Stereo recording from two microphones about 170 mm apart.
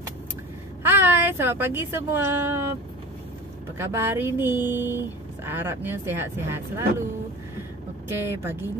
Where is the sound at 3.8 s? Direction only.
15° right (ahead or behind).